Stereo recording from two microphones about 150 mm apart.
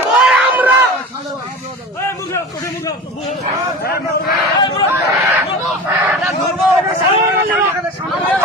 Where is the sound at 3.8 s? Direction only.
90° left.